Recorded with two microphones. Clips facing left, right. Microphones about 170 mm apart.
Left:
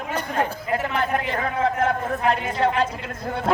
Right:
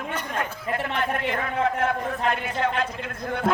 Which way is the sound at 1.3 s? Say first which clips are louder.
Left 2 dB; 35° left (ahead or behind).